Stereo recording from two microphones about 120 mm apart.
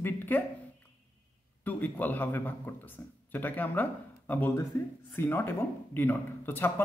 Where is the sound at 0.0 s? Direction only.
15° left (ahead or behind).